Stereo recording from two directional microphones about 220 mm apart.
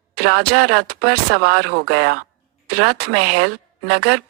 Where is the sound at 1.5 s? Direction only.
80° right.